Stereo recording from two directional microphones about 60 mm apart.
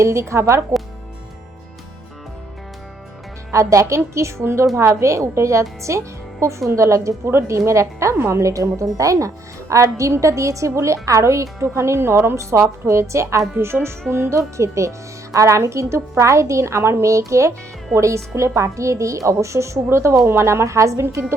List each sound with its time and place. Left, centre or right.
0.0 s a woman's voice: right
3.5 s a woman's voice: right